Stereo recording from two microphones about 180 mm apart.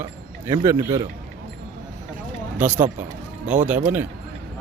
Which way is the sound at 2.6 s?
10° right (ahead or behind).